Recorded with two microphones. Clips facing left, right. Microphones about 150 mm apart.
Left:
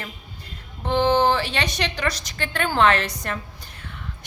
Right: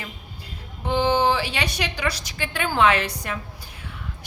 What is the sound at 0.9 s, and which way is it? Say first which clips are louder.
A woman's voice: left 1 dB; 10° right (ahead or behind).